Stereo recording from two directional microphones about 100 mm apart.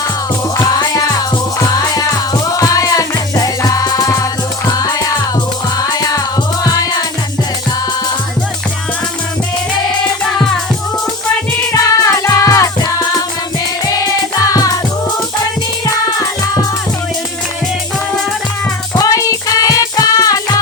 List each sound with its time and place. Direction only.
0.5 s music: 45° left (ahead or behind)
11.7 s music: 30° left (ahead or behind)
18.9 s music: 35° left (ahead or behind)